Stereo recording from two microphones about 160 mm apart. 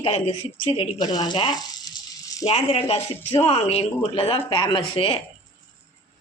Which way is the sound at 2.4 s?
45° left (ahead or behind).